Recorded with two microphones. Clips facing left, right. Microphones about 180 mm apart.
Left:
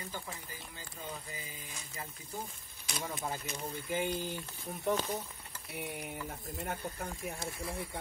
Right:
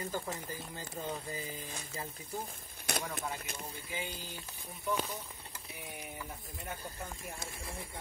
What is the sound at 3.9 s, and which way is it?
Speech, 50° left (ahead or behind).